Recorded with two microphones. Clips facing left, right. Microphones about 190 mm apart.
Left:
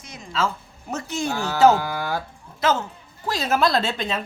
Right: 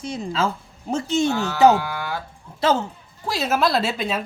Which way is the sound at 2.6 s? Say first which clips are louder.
Right 2 dB; 30° right (ahead or behind).